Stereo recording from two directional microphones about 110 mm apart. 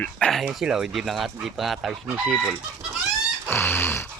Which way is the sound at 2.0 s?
20° right (ahead or behind).